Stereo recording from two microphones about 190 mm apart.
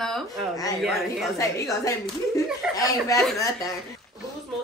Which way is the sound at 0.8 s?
Centre (ahead or behind).